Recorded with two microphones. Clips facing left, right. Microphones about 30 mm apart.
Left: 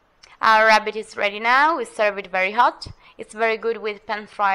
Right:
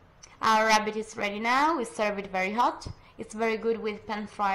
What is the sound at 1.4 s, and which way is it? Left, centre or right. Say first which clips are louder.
Speech: left 7 dB; left.